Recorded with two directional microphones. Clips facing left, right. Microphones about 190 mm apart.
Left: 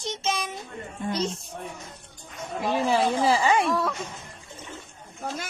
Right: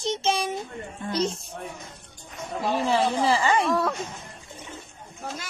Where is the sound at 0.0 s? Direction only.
30° right (ahead or behind).